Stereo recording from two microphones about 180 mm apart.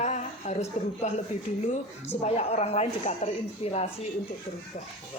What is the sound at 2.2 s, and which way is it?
A woman's voice, 35° left (ahead or behind).